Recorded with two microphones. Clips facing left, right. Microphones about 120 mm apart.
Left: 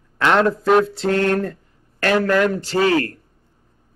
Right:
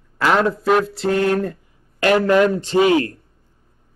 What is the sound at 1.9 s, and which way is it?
A man's voice, 15° right (ahead or behind).